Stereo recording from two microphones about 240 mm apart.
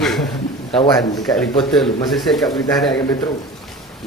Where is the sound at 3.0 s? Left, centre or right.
Centre.